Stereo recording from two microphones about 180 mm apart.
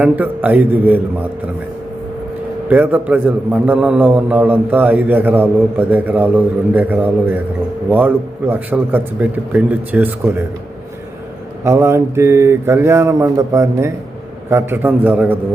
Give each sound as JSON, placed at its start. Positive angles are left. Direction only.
{"t": 0.0, "sound": "a man's voice", "side_deg": -10}
{"t": 2.6, "sound": "a man's voice", "side_deg": -10}
{"t": 11.6, "sound": "a man's voice", "side_deg": -15}